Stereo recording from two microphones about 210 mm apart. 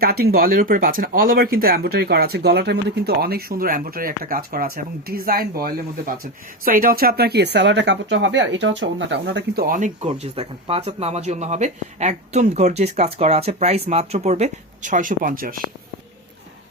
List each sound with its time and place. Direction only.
0.0 s speech: 45° right (ahead or behind)
9.7 s speech: 30° right (ahead or behind)